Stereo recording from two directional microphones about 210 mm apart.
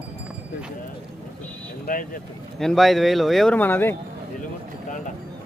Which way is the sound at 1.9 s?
45° left (ahead or behind).